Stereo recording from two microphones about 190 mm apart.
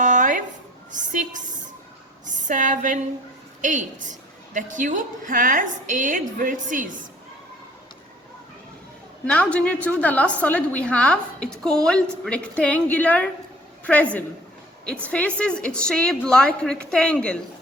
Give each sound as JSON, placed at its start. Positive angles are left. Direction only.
{"t": 0.0, "sound": "a sound", "side_deg": -40}
{"t": 0.9, "sound": "music", "side_deg": -40}
{"t": 2.2, "sound": "a woman's voice", "side_deg": -40}
{"t": 9.2, "sound": "a woman's voice", "side_deg": 5}